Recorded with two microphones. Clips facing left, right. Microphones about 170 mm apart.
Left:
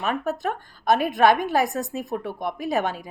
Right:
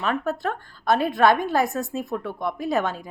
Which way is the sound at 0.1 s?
15° left (ahead or behind).